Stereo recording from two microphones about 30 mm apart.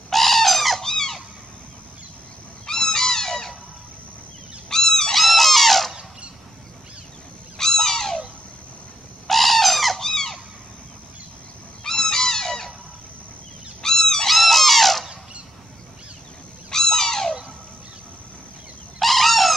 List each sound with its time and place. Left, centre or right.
0.1 s bird: centre
0.8 s squeak: centre
2.6 s goose: centre
4.6 s goose: centre
5.1 s a sound: centre
7.5 s a sound: centre
9.3 s bird: centre
10.0 s squeak: centre
11.8 s a sound: centre
13.8 s goose: centre
14.2 s squeak: centre
16.7 s goose: centre
18.9 s fowl: centre